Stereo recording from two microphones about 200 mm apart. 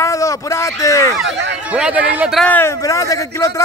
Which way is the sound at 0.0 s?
15° left (ahead or behind).